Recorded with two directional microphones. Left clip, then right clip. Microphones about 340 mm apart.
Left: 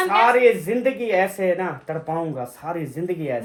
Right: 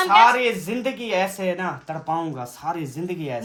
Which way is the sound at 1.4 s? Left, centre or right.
Centre.